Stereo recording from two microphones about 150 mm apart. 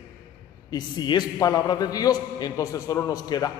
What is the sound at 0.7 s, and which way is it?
A man's voice, 30° left (ahead or behind).